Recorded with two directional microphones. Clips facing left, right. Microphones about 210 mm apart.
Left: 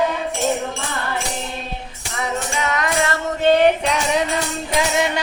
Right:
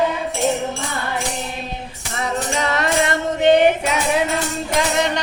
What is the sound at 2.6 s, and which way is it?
Music, 35° right (ahead or behind).